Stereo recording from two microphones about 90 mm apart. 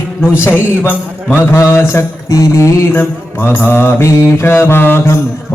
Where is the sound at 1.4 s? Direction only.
25° left (ahead or behind).